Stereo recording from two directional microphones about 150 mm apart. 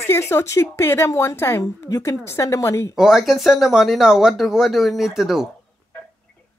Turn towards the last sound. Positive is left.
turn(degrees=-5)  # may be behind; listen again after turning